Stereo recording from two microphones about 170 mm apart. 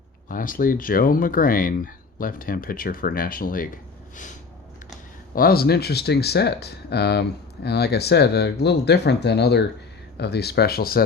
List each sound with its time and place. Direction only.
0.3 s speech: 55° left (ahead or behind)
5.3 s speech: 60° left (ahead or behind)